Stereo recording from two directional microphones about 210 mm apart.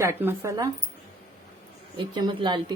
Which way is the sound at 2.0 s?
20° right (ahead or behind).